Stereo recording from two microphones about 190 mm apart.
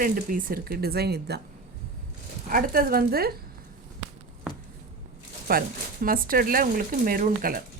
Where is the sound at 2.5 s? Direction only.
50° right (ahead or behind).